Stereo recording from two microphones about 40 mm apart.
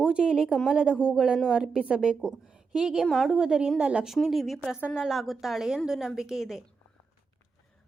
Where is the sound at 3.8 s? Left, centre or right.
Right.